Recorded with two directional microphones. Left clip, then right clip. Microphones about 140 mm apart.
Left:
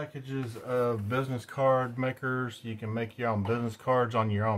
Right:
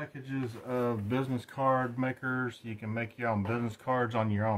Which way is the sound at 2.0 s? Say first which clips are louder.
Left 2 dB; 15° left (ahead or behind).